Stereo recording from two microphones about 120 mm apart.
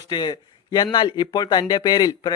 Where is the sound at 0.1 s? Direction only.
35° left (ahead or behind).